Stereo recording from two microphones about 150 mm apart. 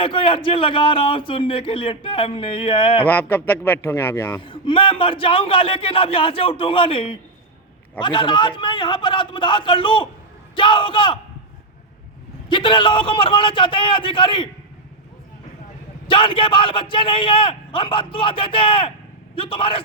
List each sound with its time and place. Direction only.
0.0 s speech: 35° left (ahead or behind)
3.1 s speech: 15° left (ahead or behind)
4.4 s speech: 35° left (ahead or behind)
12.5 s speech: 35° left (ahead or behind)
16.0 s speech: 35° left (ahead or behind)